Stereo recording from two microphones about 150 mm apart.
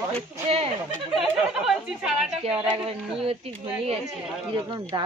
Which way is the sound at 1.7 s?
5° right (ahead or behind).